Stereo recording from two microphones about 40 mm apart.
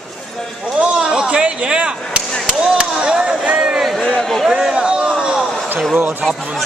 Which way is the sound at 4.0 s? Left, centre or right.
Left.